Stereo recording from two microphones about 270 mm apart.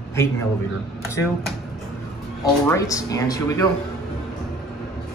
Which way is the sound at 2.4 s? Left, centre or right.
Centre.